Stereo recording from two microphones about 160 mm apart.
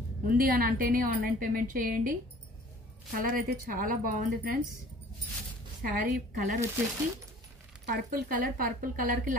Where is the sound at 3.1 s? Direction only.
65° right (ahead or behind).